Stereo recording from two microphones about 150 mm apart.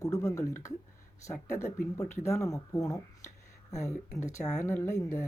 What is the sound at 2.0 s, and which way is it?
Speech, 20° left (ahead or behind).